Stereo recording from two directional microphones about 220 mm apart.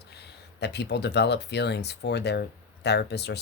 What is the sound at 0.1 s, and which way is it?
Speech, 50° left (ahead or behind).